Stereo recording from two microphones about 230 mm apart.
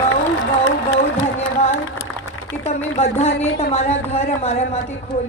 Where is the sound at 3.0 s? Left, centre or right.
Left.